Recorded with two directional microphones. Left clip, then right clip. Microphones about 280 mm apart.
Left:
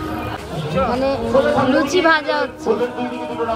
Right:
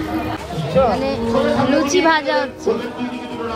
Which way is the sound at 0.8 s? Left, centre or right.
Centre.